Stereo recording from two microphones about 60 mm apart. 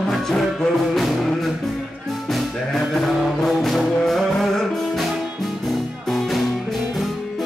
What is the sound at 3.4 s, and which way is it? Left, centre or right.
Music, centre.